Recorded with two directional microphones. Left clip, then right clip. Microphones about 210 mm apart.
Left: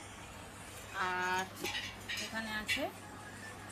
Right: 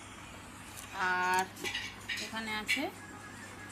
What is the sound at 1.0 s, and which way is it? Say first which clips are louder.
Speech: right 5 dB; 20° right (ahead or behind).